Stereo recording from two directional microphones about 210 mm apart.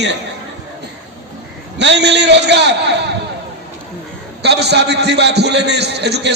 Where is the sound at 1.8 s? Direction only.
55° right (ahead or behind).